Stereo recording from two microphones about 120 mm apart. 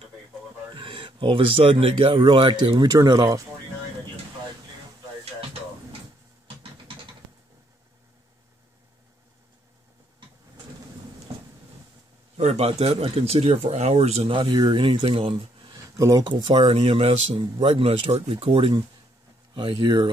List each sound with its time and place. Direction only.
0.7 s speech: 45° right (ahead or behind)
12.4 s speech: 60° right (ahead or behind); by 15.8 s 40° right (ahead or behind)
15.8 s a sound: 30° right (ahead or behind)
16.3 s speech: 45° right (ahead or behind)